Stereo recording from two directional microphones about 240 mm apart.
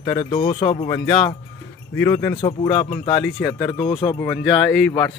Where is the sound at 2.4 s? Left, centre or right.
Left.